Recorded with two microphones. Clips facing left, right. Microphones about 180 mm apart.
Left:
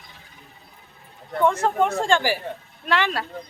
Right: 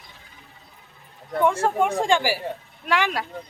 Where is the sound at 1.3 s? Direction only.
10° right (ahead or behind).